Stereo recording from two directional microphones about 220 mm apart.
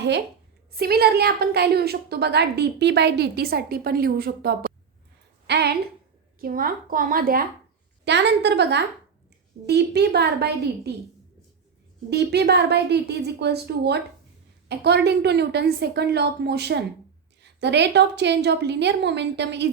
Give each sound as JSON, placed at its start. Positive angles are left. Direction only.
{"t": 0.7, "sound": "a woman's voice", "side_deg": -45}
{"t": 8.0, "sound": "a woman's voice", "side_deg": -50}
{"t": 12.1, "sound": "a woman's voice", "side_deg": -50}